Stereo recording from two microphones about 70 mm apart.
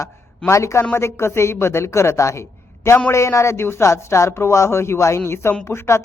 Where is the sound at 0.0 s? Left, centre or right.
Left.